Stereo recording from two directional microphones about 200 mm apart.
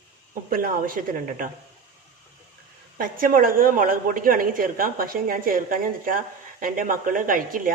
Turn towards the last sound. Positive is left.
turn(degrees=-45)  # may be behind; listen again after turning